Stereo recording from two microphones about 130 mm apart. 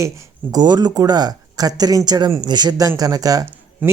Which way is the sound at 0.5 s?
35° right (ahead or behind).